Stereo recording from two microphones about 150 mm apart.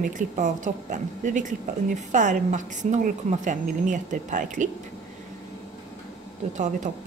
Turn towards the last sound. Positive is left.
turn(degrees=-55)  # may be behind; listen again after turning